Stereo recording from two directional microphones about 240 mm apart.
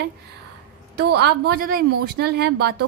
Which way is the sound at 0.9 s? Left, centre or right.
Right.